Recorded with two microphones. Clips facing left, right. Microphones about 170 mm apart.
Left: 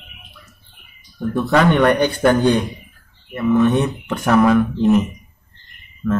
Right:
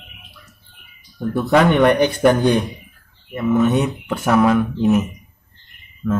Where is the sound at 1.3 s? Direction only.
10° right (ahead or behind).